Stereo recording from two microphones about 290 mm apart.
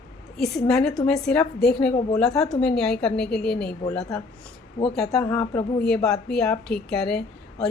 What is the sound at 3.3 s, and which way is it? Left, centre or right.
Speech, left.